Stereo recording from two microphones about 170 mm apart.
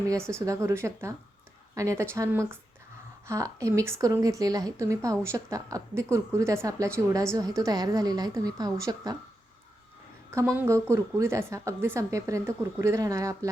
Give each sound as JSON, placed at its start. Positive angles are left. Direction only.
{"t": 0.3, "sound": "a woman's voice", "side_deg": -15}
{"t": 10.3, "sound": "a woman's voice", "side_deg": -15}